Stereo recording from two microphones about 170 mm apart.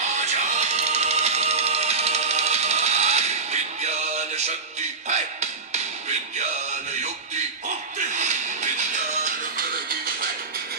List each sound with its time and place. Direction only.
0.0 s music: 45° right (ahead or behind)
9.6 s music: 60° right (ahead or behind)